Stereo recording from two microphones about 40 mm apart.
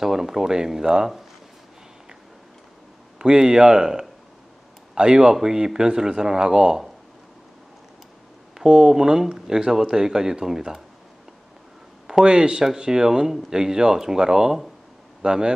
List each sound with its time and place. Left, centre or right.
0.0 s speech: centre
3.2 s speech: centre
8.5 s speech: centre
12.1 s speech: centre